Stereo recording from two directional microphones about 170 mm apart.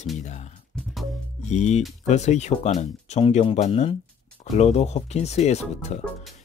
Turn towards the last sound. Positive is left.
turn(degrees=40)  # may be behind; listen again after turning